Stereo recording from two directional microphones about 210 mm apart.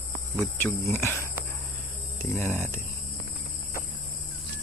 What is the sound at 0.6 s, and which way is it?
Speech, 10° left (ahead or behind).